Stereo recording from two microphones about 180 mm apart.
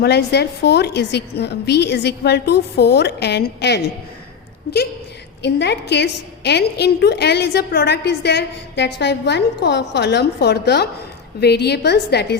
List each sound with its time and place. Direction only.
0.0 s a woman's voice: 70° left (ahead or behind)
5.4 s a woman's voice: 75° left (ahead or behind)